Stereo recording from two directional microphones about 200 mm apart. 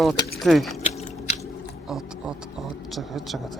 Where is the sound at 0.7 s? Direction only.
35° left (ahead or behind).